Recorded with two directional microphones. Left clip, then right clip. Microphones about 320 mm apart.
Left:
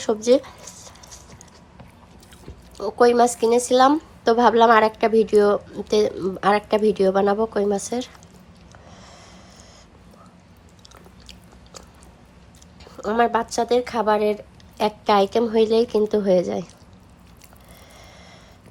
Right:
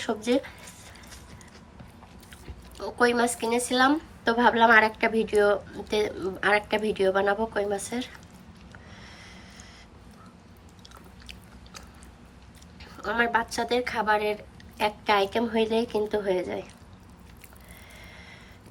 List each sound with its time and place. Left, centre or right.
0.2 s zipper: centre
2.7 s a woman's voice: centre
8.9 s vehicle: centre
12.8 s a woman's voice: centre